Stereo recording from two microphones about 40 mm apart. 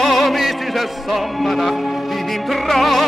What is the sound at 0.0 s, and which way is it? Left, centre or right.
Music, centre.